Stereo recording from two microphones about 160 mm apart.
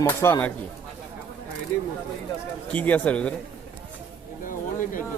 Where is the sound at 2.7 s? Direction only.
10° left (ahead or behind).